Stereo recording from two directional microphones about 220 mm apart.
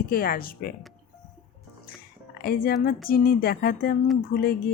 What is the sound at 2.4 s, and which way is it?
Speech, 40° left (ahead or behind).